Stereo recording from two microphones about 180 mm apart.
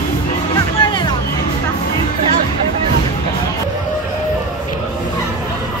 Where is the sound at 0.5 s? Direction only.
25° left (ahead or behind).